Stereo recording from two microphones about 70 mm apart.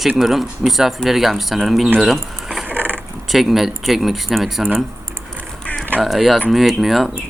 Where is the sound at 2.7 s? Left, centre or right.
Right.